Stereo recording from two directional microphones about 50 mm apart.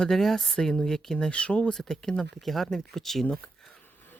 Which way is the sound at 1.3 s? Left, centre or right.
Left.